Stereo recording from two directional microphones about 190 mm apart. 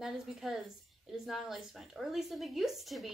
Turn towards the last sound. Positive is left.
turn(degrees=0)  # may be behind; listen again after turning